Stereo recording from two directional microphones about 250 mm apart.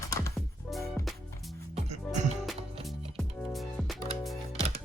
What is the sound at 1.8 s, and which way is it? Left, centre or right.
Music, right.